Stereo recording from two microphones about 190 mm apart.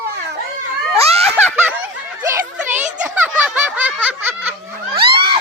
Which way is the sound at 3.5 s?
5° right (ahead or behind).